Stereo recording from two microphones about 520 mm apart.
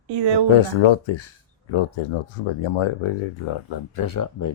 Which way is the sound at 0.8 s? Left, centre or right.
Left.